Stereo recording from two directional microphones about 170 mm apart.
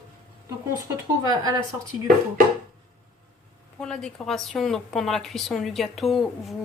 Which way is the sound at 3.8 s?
5° left (ahead or behind).